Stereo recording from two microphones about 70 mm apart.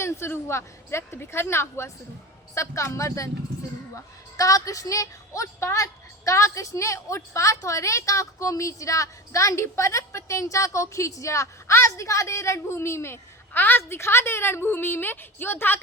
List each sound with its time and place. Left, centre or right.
0.0 s a woman's voice: left